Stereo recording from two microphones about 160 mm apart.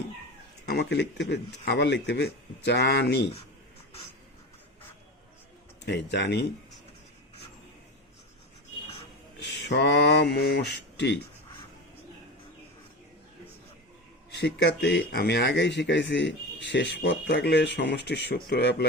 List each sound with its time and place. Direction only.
0.7 s speech: 90° left
5.8 s speech: 90° left
9.4 s speech: 90° left
14.3 s speech: 90° left